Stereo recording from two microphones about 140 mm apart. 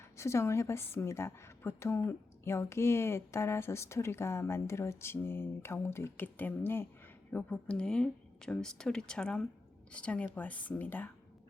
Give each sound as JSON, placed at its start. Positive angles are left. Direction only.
{"t": 0.2, "sound": "a woman's voice", "side_deg": 20}